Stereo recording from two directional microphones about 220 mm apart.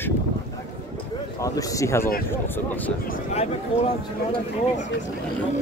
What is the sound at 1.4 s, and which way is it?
Speech, 15° left (ahead or behind).